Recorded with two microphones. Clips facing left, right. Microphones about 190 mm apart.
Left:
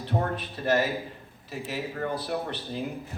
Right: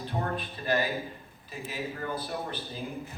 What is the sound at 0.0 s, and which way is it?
A man's voice, 75° left (ahead or behind).